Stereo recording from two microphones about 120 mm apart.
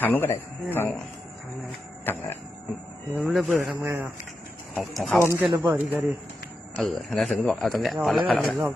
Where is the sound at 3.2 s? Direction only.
Centre (ahead or behind).